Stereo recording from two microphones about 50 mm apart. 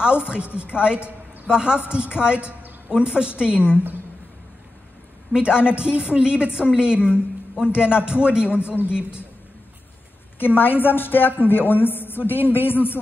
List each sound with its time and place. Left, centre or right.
0.0 s a woman's voice: centre
5.3 s a woman's voice: centre
10.4 s a woman's voice: left